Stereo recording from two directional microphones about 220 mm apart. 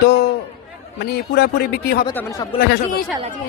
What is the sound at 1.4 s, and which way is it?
Speech, 45° left (ahead or behind).